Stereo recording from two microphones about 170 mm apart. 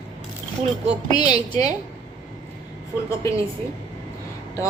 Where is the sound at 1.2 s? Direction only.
25° left (ahead or behind).